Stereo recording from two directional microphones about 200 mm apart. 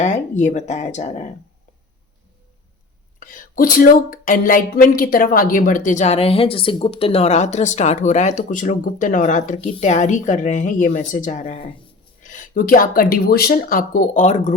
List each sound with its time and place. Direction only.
0.0 s speech: 35° left (ahead or behind)
3.2 s speech: 40° left (ahead or behind)